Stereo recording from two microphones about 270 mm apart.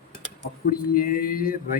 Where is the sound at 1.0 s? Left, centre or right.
Left.